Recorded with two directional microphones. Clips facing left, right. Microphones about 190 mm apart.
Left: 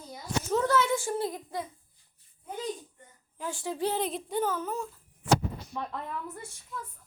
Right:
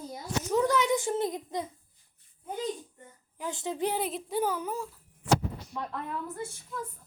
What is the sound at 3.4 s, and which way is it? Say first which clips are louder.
Speech: even; 20° right (ahead or behind).